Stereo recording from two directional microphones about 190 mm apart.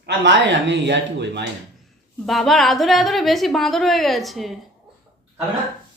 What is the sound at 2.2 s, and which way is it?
A woman's voice, centre (ahead or behind).